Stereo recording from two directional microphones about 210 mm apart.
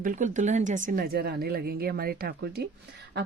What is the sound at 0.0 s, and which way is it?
Speech, 40° right (ahead or behind).